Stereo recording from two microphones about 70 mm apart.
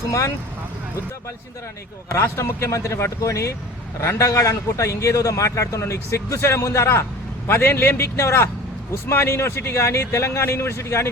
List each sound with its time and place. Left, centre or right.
0.1 s a man's voice: left
2.1 s a man's voice: left